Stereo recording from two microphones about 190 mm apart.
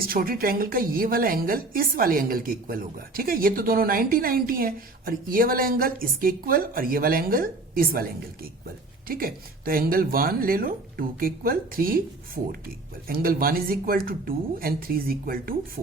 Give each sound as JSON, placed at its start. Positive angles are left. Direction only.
{"t": 0.0, "sound": "a woman's voice", "side_deg": -50}
{"t": 9.0, "sound": "a woman's voice", "side_deg": -50}